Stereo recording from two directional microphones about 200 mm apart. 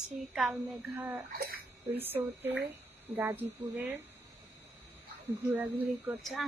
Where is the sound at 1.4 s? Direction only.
50° right (ahead or behind).